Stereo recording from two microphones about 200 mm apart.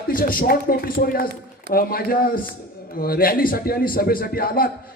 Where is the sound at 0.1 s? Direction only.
45° left (ahead or behind).